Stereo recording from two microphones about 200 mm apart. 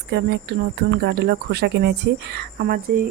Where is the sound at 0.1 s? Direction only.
55° right (ahead or behind).